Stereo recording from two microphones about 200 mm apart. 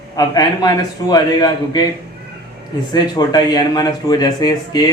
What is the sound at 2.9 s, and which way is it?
Speech, 20° left (ahead or behind).